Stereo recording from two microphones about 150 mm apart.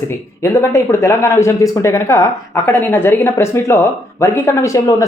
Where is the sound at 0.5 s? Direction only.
20° left (ahead or behind).